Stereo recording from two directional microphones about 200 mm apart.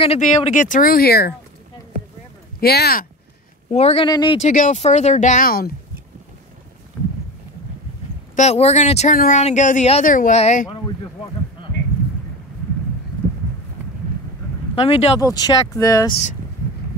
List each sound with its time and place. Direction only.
0.0 s speech: 30° left (ahead or behind); by 1.3 s 50° left (ahead or behind)
2.6 s speech: 50° left (ahead or behind)
3.7 s speech: 30° left (ahead or behind)
4.4 s speech: 40° left (ahead or behind)
8.4 s speech: 35° left (ahead or behind)
14.8 s speech: 30° left (ahead or behind)
15.1 s speech: 20° left (ahead or behind)